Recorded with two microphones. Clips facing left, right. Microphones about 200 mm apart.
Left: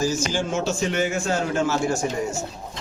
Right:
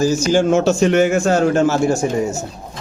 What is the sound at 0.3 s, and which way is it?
A man's voice, 70° right (ahead or behind).